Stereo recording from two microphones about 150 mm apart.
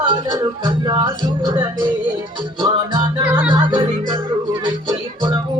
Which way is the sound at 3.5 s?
30° right (ahead or behind).